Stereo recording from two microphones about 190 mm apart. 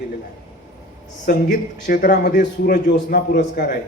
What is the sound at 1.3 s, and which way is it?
A man's voice, 50° left (ahead or behind).